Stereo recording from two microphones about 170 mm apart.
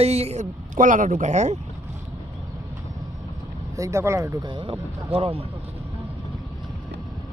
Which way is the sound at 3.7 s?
15° right (ahead or behind).